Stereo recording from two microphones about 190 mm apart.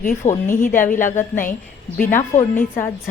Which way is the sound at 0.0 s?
50° left (ahead or behind).